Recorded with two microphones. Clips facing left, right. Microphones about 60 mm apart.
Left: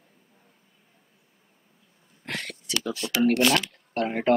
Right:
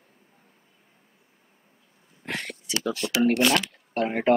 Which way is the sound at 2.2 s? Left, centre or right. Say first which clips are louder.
Right 1 dB; centre.